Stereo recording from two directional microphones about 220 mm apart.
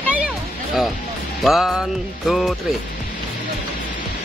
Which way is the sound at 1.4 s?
Centre (ahead or behind).